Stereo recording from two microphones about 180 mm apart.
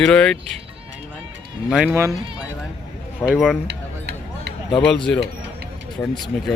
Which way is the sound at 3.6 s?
70° right (ahead or behind).